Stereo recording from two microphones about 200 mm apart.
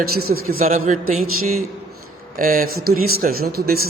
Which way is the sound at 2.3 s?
45° right (ahead or behind).